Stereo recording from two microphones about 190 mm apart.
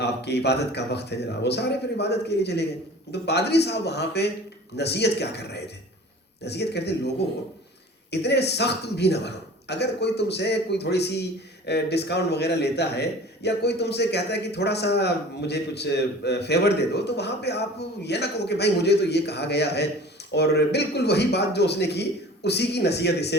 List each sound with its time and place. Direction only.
0.0 s a man's voice: 60° left (ahead or behind)